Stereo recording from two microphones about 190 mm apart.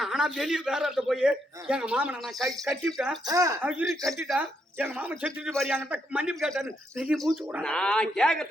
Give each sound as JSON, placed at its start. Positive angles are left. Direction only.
{"t": 0.0, "sound": "a man's voice", "side_deg": -5}
{"t": 3.2, "sound": "speech", "side_deg": -15}
{"t": 3.7, "sound": "a man's voice", "side_deg": -5}
{"t": 5.5, "sound": "a man's voice", "side_deg": 5}
{"t": 5.7, "sound": "a man's voice", "side_deg": -5}